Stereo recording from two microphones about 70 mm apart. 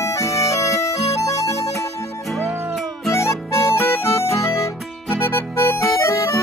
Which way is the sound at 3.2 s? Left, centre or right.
Left.